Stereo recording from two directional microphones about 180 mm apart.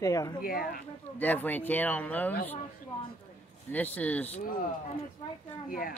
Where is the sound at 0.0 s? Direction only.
20° left (ahead or behind).